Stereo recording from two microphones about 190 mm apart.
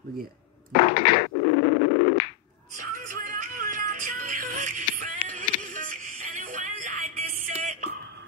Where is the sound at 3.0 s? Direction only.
45° right (ahead or behind).